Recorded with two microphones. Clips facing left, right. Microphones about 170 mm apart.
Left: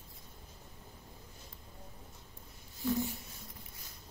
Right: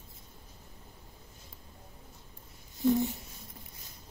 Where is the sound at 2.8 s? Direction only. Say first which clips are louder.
Right 7 dB; 20° right (ahead or behind).